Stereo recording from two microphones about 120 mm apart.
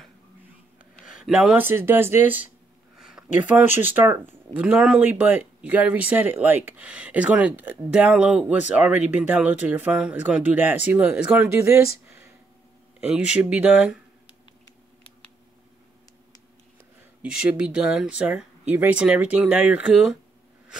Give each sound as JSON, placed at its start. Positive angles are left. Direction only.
{"t": 1.0, "sound": "speech", "side_deg": -5}
{"t": 3.0, "sound": "speech", "side_deg": -5}
{"t": 13.0, "sound": "speech", "side_deg": -10}
{"t": 17.2, "sound": "speech", "side_deg": -10}